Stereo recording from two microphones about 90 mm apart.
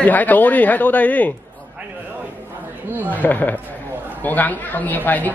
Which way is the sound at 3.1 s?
20° left (ahead or behind).